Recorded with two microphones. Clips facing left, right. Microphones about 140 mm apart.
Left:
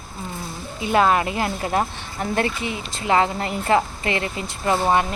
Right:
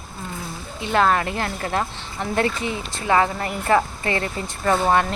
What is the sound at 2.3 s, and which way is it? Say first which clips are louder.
Speech: right 2 dB; 30° right (ahead or behind).